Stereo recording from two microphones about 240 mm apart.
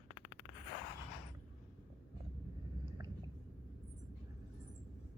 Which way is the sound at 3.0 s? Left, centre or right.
Centre.